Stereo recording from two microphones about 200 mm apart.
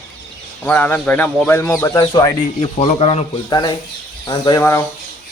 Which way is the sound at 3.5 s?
20° left (ahead or behind).